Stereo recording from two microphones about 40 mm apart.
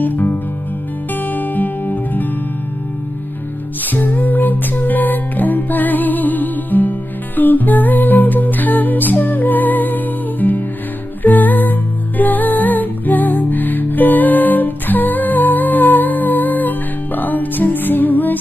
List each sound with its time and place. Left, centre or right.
0.0 s music: left
3.8 s music: left